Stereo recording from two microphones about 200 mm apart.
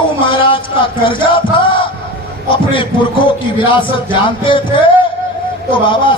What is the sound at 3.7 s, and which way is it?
Speech, 25° left (ahead or behind).